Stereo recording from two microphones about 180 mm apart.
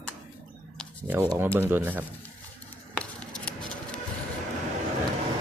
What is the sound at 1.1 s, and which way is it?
Speech, 15° right (ahead or behind).